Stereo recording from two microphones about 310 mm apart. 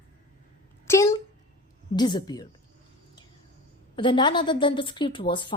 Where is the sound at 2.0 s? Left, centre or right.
Centre.